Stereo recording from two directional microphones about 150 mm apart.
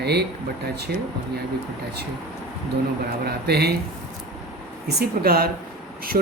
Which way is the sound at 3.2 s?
90° right.